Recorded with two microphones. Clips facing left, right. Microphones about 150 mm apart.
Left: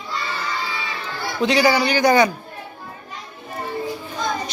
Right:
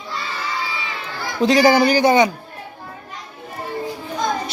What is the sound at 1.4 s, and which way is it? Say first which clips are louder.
Speech: right 4 dB; 40° right (ahead or behind).